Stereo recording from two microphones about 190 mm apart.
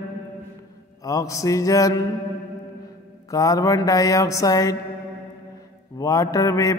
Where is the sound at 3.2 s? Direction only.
20° left (ahead or behind).